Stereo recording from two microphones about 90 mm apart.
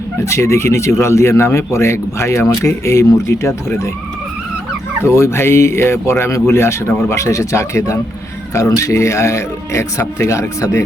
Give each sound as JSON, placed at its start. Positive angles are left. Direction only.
{"t": 0.2, "sound": "speech", "side_deg": 35}
{"t": 5.0, "sound": "speech", "side_deg": 30}